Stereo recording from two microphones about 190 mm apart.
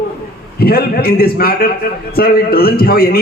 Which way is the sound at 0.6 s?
50° left (ahead or behind).